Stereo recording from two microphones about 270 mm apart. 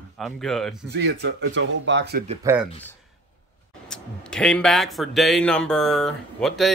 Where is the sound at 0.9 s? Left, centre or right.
Right.